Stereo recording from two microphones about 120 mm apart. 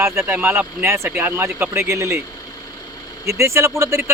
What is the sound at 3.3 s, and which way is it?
Speech, 25° right (ahead or behind).